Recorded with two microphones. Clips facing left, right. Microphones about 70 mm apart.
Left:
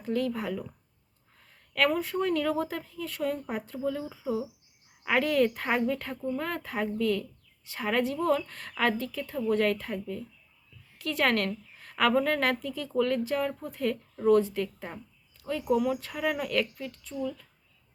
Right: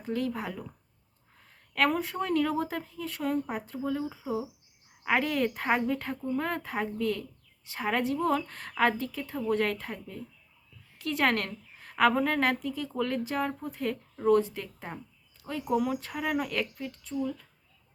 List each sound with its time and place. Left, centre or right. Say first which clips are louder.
0.0 s speech: left 2 dB; right
2.0 s a woman's voice: even; right